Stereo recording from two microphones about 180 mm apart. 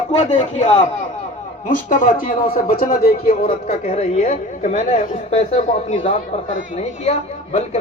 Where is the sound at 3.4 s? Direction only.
35° left (ahead or behind).